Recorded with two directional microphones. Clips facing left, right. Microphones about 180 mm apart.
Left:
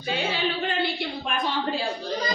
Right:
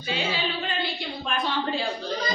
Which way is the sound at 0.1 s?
55° left (ahead or behind).